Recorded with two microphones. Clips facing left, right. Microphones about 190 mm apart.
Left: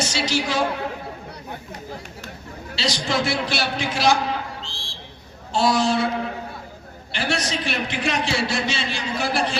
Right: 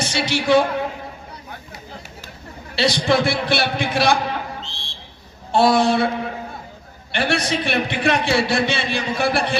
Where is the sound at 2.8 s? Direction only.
55° right (ahead or behind).